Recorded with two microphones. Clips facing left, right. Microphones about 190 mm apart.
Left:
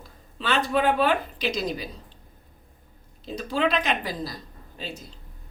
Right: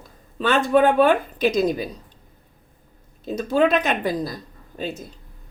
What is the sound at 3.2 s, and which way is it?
A woman's voice, 45° right (ahead or behind).